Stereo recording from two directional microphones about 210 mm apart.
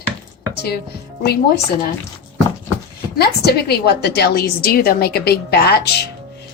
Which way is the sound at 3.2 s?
50° left (ahead or behind).